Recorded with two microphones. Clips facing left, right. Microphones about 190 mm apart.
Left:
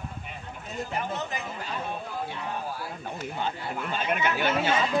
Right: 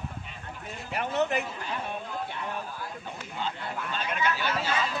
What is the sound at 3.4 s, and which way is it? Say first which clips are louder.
Speech: left 1 dB; 50° left (ahead or behind).